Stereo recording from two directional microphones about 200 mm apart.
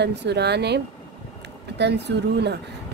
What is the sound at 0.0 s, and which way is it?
A woman's voice, 60° right (ahead or behind).